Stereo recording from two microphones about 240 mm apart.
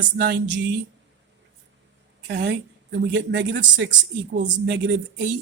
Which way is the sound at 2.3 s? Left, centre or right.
Right.